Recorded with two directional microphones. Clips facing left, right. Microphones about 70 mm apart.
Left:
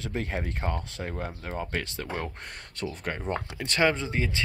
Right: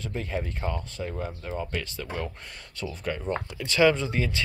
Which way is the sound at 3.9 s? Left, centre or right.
Left.